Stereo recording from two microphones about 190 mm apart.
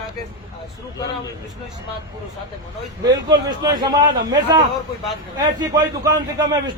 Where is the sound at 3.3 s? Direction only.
20° right (ahead or behind).